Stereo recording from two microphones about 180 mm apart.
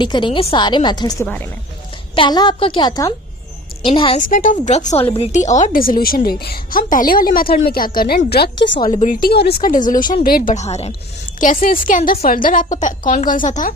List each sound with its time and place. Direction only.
0.0 s a woman's voice: 25° left (ahead or behind)
4.2 s a woman's voice: 45° left (ahead or behind); by 8.8 s 85° left
9.0 s a woman's voice: 45° left (ahead or behind)
9.3 s a woman's voice: 65° left (ahead or behind); by 10.9 s 35° left (ahead or behind)
11.3 s a woman's voice: 50° left (ahead or behind)